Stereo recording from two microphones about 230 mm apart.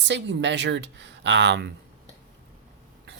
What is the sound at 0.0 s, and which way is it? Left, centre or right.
Speech, right.